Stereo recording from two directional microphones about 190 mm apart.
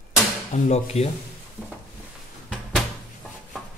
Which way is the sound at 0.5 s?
35° left (ahead or behind).